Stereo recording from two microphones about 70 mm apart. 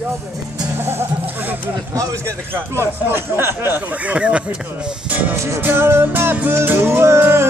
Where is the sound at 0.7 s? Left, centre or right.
Right.